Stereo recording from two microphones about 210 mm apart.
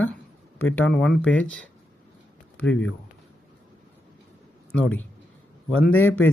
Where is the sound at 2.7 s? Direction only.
5° left (ahead or behind).